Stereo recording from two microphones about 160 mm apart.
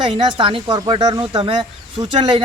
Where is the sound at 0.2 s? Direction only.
35° right (ahead or behind).